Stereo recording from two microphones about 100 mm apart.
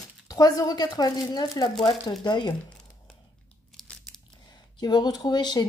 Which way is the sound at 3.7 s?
5° left (ahead or behind).